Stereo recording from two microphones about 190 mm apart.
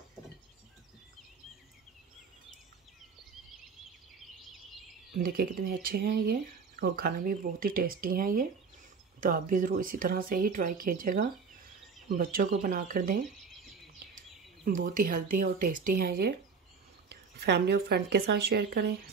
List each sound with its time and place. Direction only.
5.2 s speech: 50° right (ahead or behind)
14.6 s speech: 45° right (ahead or behind)